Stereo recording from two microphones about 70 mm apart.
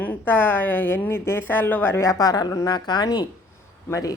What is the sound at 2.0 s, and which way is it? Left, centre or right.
Speech, left.